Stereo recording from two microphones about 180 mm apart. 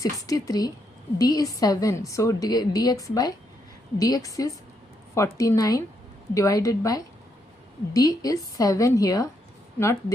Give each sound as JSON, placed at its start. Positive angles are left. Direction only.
{"t": 0.0, "sound": "a woman's voice", "side_deg": 20}